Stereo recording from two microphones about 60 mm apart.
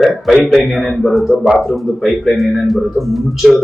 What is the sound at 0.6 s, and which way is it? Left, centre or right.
A man's voice, centre.